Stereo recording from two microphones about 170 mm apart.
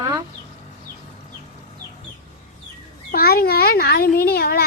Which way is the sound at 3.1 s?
60° left (ahead or behind).